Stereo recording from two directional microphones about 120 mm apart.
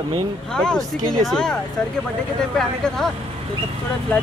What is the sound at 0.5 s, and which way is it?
Speech, 5° left (ahead or behind).